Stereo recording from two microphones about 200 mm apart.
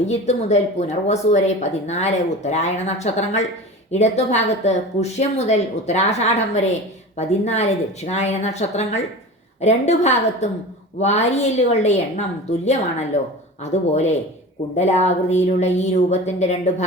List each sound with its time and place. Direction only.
0.0 s speech: 35° left (ahead or behind)